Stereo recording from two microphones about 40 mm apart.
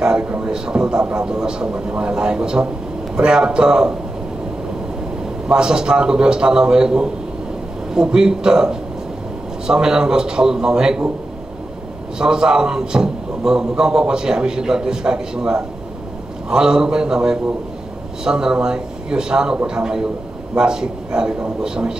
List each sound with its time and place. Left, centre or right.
0.4 s speech: right
5.5 s a man's voice: centre
12.2 s a man's voice: centre